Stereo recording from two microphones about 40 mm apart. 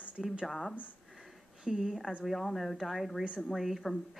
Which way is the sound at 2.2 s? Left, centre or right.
Centre.